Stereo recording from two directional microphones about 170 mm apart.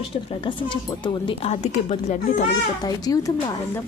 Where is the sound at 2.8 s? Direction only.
20° left (ahead or behind).